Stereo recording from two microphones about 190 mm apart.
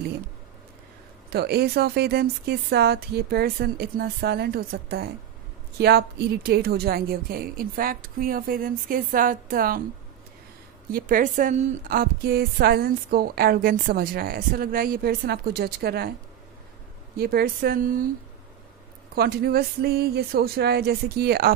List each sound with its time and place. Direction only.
1.3 s a woman's voice: 60° right (ahead or behind)
10.9 s a woman's voice: 45° right (ahead or behind)
17.2 s a woman's voice: 55° right (ahead or behind)
19.1 s speech: 55° right (ahead or behind)